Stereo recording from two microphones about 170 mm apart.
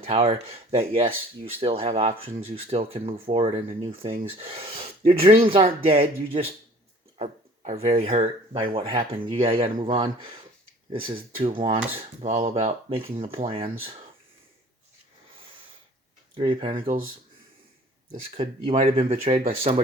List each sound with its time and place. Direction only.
0.0 s speech: 35° right (ahead or behind)
16.3 s speech: 30° right (ahead or behind)
18.3 s speech: 40° right (ahead or behind)